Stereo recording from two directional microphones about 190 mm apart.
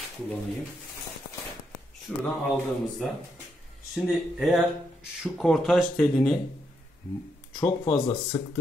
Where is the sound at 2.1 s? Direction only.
Centre (ahead or behind).